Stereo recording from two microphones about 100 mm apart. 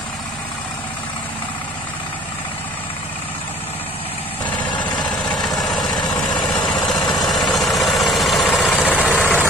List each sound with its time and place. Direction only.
4.9 s vehicle: 5° left (ahead or behind)
8.7 s vehicle: 15° left (ahead or behind)